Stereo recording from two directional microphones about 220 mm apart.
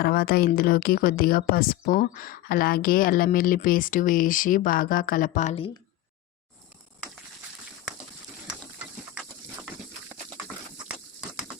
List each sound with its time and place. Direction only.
0.0 s a woman's voice: 45° left (ahead or behind)